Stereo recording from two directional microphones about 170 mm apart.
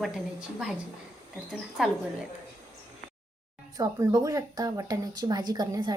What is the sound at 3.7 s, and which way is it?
Speech, 20° right (ahead or behind).